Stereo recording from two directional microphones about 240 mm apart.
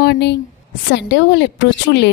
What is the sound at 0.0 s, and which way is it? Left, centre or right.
A woman's voice, left.